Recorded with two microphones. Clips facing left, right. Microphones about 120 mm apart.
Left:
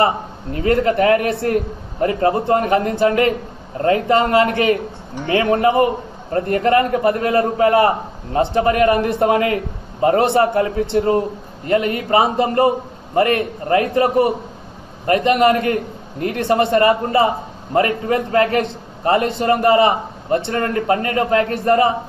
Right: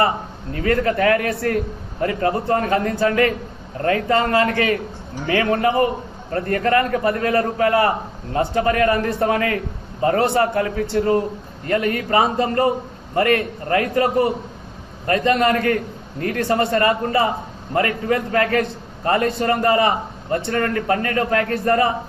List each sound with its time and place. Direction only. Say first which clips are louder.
0.0 s a man's voice: left 2 dB; 25° left (ahead or behind)